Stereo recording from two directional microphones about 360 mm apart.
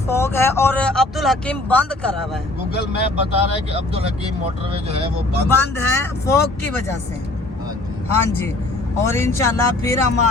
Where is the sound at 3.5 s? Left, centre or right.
Centre.